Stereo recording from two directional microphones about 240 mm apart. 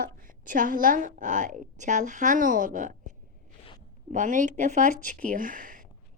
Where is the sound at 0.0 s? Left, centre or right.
Right.